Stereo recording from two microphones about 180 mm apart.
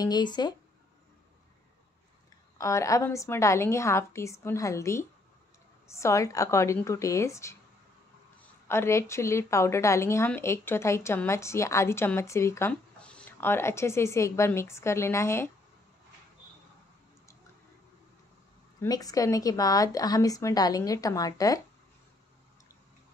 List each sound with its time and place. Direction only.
0.0 s speech: 25° left (ahead or behind)
2.5 s a woman's voice: 15° left (ahead or behind)
8.6 s a woman's voice: 15° left (ahead or behind)
18.8 s speech: 20° left (ahead or behind)